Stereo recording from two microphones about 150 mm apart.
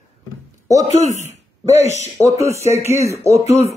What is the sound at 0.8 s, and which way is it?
Speech, 50° left (ahead or behind).